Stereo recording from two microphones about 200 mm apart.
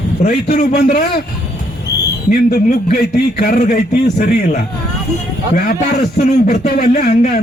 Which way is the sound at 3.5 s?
35° left (ahead or behind).